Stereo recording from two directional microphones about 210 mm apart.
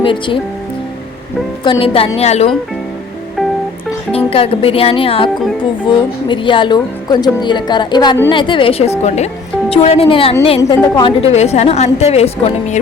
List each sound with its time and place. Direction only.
0.0 s a woman's voice: 25° left (ahead or behind)
1.6 s a woman's voice: 25° left (ahead or behind)
4.1 s a woman's voice: 25° left (ahead or behind)
10.6 s a woman's voice: 15° left (ahead or behind)
11.2 s a woman's voice: 30° left (ahead or behind)